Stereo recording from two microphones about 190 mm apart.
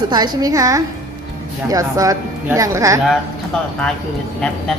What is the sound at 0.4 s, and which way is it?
Speech, 20° right (ahead or behind).